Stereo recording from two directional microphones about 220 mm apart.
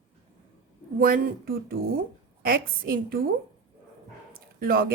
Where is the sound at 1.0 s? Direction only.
40° right (ahead or behind).